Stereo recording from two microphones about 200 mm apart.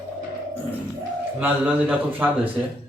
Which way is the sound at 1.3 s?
5° right (ahead or behind).